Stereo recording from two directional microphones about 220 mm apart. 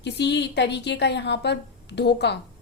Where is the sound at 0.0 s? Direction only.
50° left (ahead or behind).